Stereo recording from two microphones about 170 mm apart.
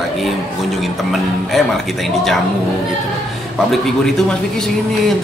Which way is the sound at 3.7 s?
5° left (ahead or behind).